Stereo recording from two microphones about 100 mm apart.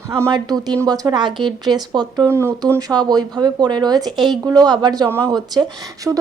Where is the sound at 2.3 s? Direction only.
25° right (ahead or behind); by 5.7 s 45° right (ahead or behind).